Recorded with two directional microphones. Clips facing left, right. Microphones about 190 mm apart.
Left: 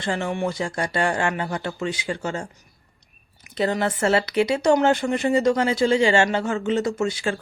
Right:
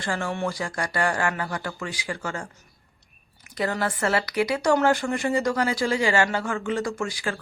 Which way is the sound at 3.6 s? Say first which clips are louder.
Left 4 dB; 25° left (ahead or behind).